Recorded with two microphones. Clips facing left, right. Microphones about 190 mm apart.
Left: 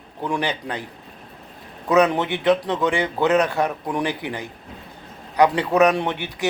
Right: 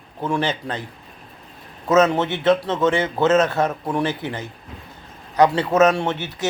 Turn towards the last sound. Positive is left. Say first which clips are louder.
# right 1 dB
turn(degrees=15)  # may be behind; listen again after turning